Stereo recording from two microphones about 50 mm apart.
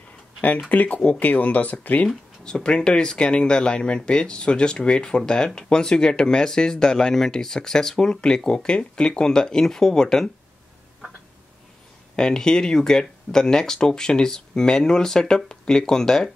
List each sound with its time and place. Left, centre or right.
0.7 s speech: left
2.4 s speech: centre
12.2 s speech: centre